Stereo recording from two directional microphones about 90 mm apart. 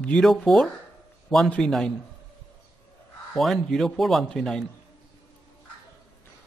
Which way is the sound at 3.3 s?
Centre (ahead or behind).